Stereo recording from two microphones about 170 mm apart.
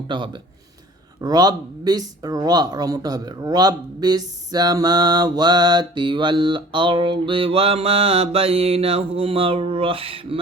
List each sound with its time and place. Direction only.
1.2 s speech: 25° right (ahead or behind)